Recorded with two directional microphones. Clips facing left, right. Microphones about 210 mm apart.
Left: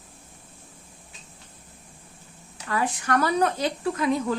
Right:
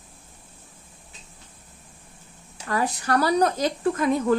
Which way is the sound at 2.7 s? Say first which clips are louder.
Right 1 dB; 40° right (ahead or behind).